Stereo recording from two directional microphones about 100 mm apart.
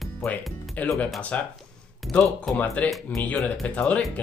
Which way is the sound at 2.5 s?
Centre (ahead or behind).